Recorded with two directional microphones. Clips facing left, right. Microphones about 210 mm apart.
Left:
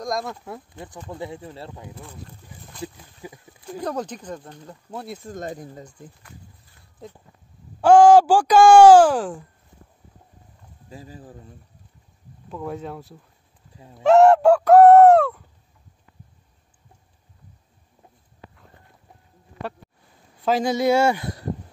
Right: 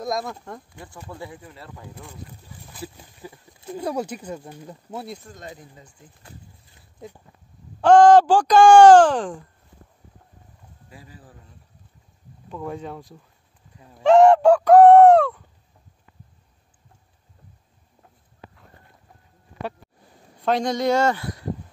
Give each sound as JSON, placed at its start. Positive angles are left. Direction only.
{"t": 0.0, "sound": "speech", "side_deg": 0}
{"t": 0.7, "sound": "speech", "side_deg": 20}
{"t": 2.2, "sound": "speech", "side_deg": -5}
{"t": 3.2, "sound": "speech", "side_deg": 15}
{"t": 3.6, "sound": "speech", "side_deg": -10}
{"t": 5.3, "sound": "speech", "side_deg": 45}
{"t": 7.8, "sound": "speech", "side_deg": 10}
{"t": 11.0, "sound": "speech", "side_deg": 40}
{"t": 12.4, "sound": "speech", "side_deg": 5}
{"t": 13.7, "sound": "a sound", "side_deg": 25}
{"t": 14.0, "sound": "a sound", "side_deg": 5}
{"t": 20.4, "sound": "speech", "side_deg": 5}